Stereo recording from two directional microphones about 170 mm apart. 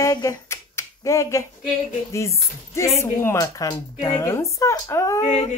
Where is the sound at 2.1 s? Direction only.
15° left (ahead or behind).